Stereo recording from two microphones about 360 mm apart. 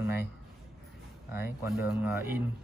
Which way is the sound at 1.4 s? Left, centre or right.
Centre.